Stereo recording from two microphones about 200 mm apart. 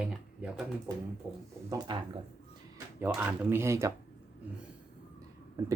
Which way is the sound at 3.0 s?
5° right (ahead or behind).